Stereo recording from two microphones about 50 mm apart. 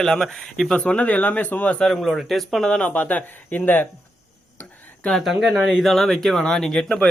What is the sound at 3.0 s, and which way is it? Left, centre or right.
Speech, left.